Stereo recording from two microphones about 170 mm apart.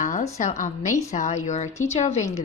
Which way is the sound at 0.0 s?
45° left (ahead or behind).